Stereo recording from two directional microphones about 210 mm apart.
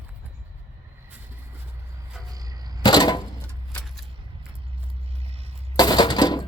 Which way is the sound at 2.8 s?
20° left (ahead or behind).